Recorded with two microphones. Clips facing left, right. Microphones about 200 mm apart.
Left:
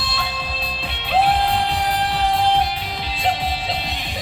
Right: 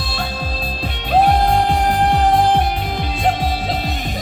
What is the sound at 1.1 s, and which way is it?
Music, 45° right (ahead or behind).